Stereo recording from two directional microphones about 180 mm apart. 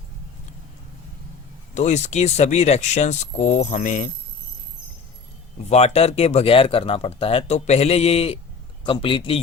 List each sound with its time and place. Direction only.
1.7 s speech: 40° left (ahead or behind)
5.6 s a man's voice: 35° left (ahead or behind)